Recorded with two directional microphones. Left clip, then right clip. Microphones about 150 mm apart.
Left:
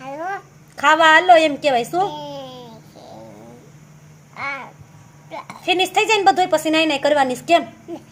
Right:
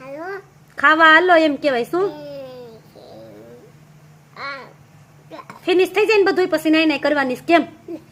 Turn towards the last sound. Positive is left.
turn(degrees=-45)  # may be behind; listen again after turning